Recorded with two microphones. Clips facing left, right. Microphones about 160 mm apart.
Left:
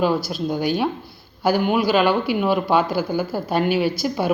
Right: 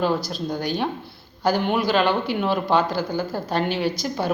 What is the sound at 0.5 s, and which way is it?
A woman's voice, 10° left (ahead or behind).